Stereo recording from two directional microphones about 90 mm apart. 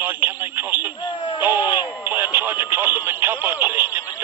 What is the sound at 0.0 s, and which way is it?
Radio, 20° right (ahead or behind).